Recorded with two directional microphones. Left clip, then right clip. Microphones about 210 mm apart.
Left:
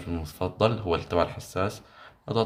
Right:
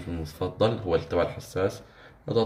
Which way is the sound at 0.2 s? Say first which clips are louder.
Even; 55° left (ahead or behind).